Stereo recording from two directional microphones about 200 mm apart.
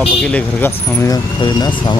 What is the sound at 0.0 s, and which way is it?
Speech, 5° left (ahead or behind).